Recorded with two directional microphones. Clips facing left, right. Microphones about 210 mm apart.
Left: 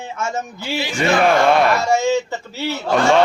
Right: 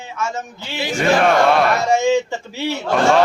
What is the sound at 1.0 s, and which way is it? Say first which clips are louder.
Speech: right 1 dB; centre (ahead or behind).